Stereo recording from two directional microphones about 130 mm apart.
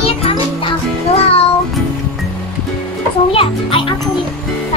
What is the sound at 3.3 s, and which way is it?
Music, 40° left (ahead or behind).